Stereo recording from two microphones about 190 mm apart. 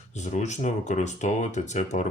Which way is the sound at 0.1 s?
40° left (ahead or behind).